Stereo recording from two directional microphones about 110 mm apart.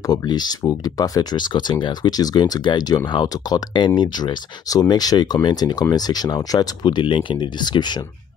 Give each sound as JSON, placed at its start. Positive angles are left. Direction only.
{"t": 0.0, "sound": "speech", "side_deg": 40}